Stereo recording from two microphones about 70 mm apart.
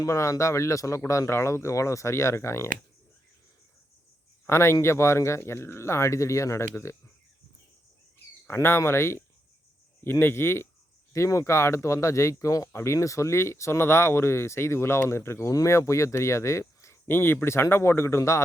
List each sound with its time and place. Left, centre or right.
0.0 s speech: left
4.4 s speech: left
8.4 s speech: left